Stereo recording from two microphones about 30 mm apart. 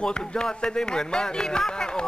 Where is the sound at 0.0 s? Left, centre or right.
Left.